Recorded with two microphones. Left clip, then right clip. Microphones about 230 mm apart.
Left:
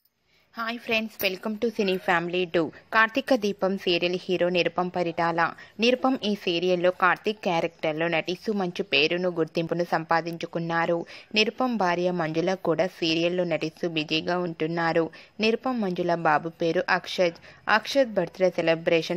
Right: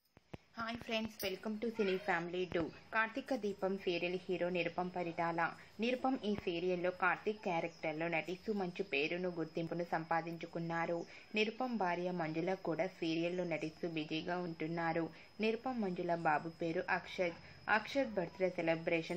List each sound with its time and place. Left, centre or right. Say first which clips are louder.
0.6 s a woman's voice: left 13 dB; left